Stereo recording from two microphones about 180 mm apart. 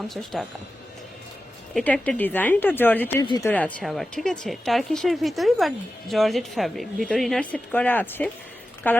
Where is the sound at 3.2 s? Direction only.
25° left (ahead or behind).